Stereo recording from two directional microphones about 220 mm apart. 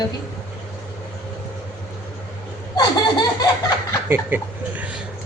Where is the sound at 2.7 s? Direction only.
20° left (ahead or behind).